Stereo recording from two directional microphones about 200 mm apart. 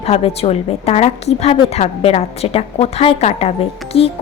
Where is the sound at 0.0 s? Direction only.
30° left (ahead or behind).